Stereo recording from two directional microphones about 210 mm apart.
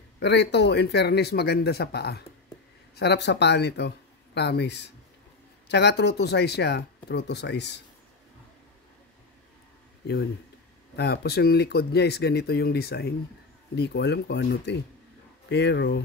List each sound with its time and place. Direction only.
0.2 s speech: 55° left (ahead or behind)
11.0 s speech: 50° left (ahead or behind)